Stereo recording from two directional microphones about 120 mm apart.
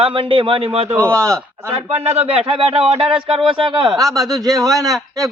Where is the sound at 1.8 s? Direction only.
60° right (ahead or behind).